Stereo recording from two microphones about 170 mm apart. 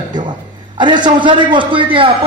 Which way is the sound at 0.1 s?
25° right (ahead or behind).